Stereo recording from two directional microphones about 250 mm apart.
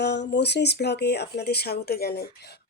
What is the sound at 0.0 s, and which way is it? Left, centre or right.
Speech, left.